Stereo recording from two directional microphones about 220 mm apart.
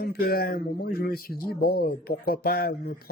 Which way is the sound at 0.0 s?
45° left (ahead or behind).